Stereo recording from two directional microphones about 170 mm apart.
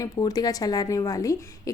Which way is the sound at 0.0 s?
20° left (ahead or behind).